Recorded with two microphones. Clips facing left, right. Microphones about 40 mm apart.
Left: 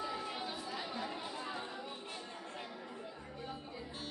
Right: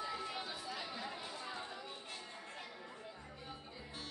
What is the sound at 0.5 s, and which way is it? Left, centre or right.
Chatter, centre.